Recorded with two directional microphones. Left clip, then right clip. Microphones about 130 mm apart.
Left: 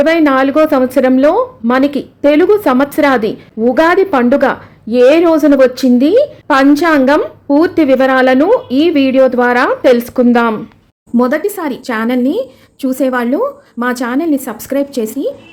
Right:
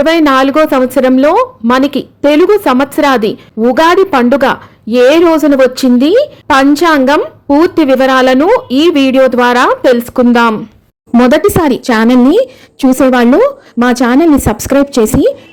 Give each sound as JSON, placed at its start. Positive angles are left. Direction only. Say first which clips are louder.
{"t": 0.0, "sound": "a woman's voice", "louder": "right 2 dB", "side_deg": -30}
{"t": 11.2, "sound": "a woman's voice", "louder": "right 6 dB", "side_deg": -65}